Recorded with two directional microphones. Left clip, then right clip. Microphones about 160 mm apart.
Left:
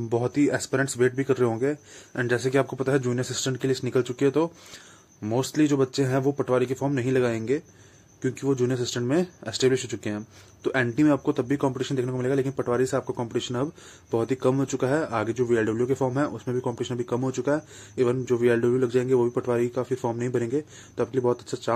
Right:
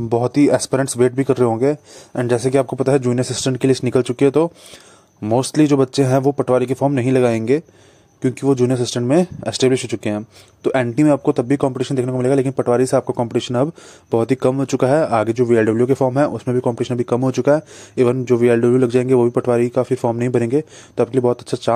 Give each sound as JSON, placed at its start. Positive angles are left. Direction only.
{"t": 0.1, "sound": "speech", "side_deg": -45}